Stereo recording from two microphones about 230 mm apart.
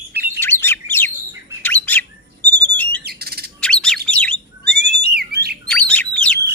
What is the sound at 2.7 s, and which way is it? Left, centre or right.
Squawk, centre.